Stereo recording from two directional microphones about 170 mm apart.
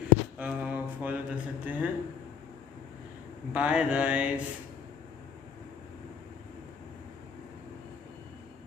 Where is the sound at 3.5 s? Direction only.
5° right (ahead or behind).